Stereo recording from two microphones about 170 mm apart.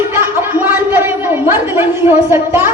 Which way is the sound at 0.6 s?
10° right (ahead or behind).